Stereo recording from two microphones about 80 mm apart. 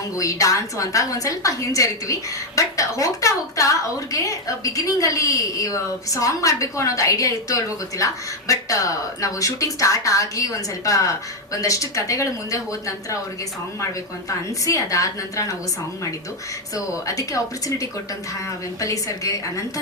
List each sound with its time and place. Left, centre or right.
0.2 s a woman's voice: left
13.8 s a woman's voice: left
16.7 s a woman's voice: left